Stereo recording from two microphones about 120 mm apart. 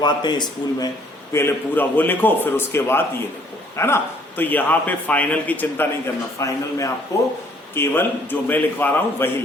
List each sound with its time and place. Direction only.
0.0 s speech: 35° left (ahead or behind)
1.3 s a man's voice: 20° left (ahead or behind)
6.4 s a man's voice: 25° left (ahead or behind)